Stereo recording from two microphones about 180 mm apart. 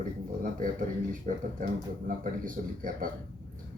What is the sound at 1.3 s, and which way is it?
Speech, 45° right (ahead or behind).